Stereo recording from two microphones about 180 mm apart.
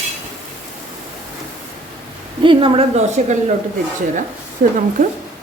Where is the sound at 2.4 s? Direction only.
30° right (ahead or behind).